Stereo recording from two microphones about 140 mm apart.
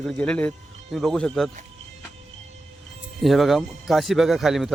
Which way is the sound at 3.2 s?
Centre (ahead or behind).